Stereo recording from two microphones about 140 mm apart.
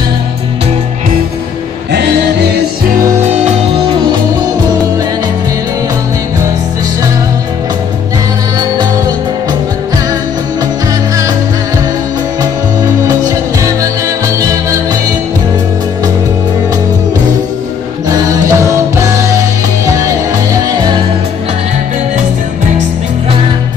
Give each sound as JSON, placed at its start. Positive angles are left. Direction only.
{"t": 14.2, "sound": "music", "side_deg": -25}
{"t": 18.0, "sound": "music", "side_deg": -25}